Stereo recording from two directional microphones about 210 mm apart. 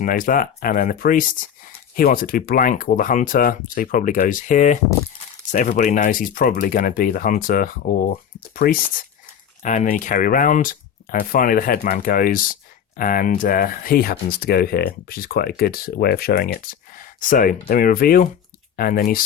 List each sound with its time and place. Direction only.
0.0 s speech: 40° left (ahead or behind)